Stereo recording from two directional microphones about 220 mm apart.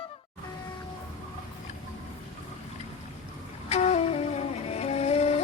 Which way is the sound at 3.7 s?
30° left (ahead or behind).